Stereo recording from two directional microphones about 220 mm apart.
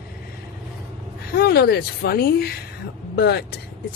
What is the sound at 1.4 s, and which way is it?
Speech, 45° left (ahead or behind).